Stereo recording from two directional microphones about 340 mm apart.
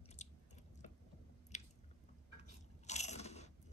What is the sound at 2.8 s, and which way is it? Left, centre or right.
Scrape, centre.